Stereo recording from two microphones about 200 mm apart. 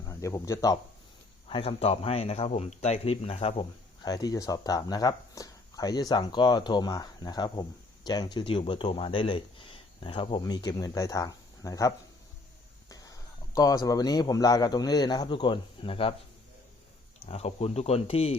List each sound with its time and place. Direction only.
0.0 s speech: 15° left (ahead or behind)
1.5 s speech: 30° left (ahead or behind)
17.2 s speech: 30° left (ahead or behind)